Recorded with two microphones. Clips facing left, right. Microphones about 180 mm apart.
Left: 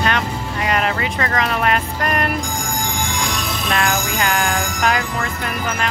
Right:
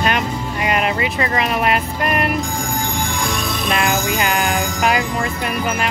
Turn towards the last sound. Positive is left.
turn(degrees=-20)  # may be behind; listen again after turning